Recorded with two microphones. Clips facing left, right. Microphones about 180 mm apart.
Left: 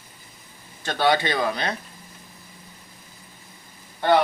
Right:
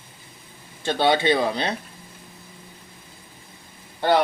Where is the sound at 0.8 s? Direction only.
25° right (ahead or behind).